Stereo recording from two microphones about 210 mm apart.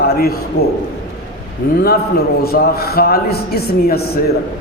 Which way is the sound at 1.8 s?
45° left (ahead or behind).